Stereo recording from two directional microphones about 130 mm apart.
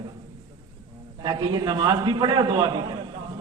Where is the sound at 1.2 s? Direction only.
35° right (ahead or behind).